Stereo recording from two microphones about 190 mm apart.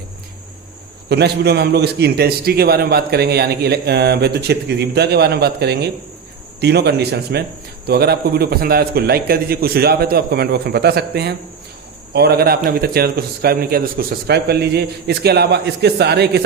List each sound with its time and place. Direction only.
1.1 s a man's voice: 60° right (ahead or behind)